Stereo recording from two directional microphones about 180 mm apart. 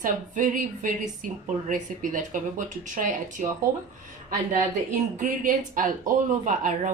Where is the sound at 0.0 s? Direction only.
45° right (ahead or behind).